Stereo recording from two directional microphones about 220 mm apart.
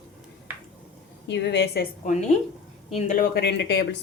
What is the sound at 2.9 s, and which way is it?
Speech, 30° left (ahead or behind).